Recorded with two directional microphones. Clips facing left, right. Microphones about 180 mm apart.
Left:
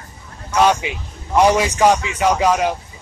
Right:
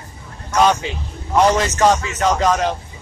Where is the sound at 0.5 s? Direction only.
10° left (ahead or behind).